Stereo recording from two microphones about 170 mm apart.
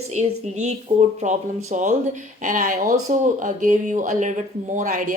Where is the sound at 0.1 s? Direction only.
45° right (ahead or behind).